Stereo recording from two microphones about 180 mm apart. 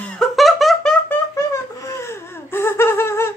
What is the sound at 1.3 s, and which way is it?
Laughter, 15° left (ahead or behind).